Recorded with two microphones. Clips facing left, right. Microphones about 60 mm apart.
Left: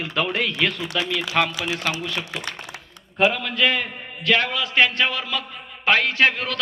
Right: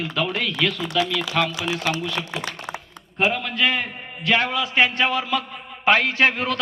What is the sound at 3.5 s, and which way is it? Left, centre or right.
A man's voice, right.